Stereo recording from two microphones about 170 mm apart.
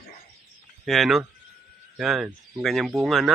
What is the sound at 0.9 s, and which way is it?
Speech, centre (ahead or behind).